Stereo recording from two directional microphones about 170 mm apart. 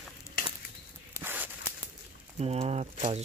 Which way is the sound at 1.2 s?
10° right (ahead or behind).